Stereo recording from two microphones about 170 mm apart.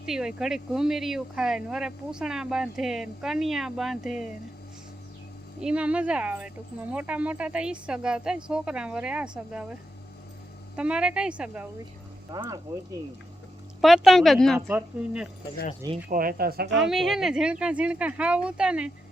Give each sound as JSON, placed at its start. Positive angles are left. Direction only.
{"t": 0.0, "sound": "speech", "side_deg": -5}
{"t": 5.5, "sound": "speech", "side_deg": -5}
{"t": 10.8, "sound": "speech", "side_deg": -5}
{"t": 12.3, "sound": "speech", "side_deg": -20}
{"t": 13.8, "sound": "speech", "side_deg": 0}
{"t": 16.0, "sound": "speech", "side_deg": -55}
{"t": 16.7, "sound": "speech", "side_deg": 0}